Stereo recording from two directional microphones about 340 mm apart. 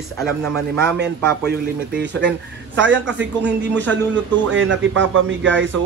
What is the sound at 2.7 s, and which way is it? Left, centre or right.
Speech, right.